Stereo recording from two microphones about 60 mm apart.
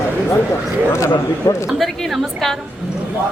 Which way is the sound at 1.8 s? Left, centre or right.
Centre.